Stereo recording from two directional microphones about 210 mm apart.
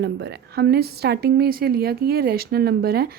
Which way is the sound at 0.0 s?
50° right (ahead or behind).